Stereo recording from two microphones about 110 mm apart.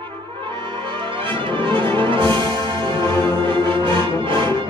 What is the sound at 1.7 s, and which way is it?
Music, 50° right (ahead or behind).